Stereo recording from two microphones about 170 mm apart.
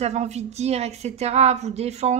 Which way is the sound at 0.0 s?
40° right (ahead or behind).